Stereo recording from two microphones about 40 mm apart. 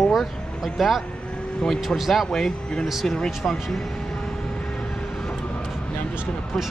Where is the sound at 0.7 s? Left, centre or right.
Centre.